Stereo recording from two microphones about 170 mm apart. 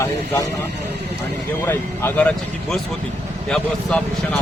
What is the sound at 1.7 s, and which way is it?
Speech, 10° left (ahead or behind).